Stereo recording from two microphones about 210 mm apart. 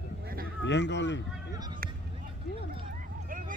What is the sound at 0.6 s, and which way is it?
Speech, 55° left (ahead or behind).